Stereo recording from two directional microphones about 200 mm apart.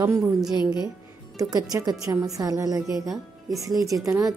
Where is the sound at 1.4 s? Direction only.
20° right (ahead or behind).